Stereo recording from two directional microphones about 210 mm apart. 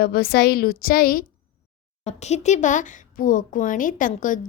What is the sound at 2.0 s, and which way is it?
Speech, 30° left (ahead or behind).